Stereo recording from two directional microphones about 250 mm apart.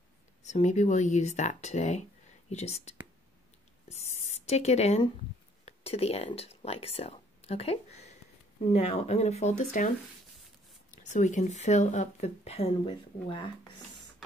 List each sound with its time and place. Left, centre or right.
0.4 s speech: left